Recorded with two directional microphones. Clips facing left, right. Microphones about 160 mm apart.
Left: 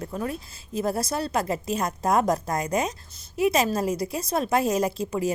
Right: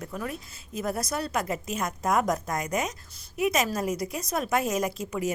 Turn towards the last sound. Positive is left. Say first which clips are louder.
# left 4 dB
turn(degrees=30)  # may be behind; listen again after turning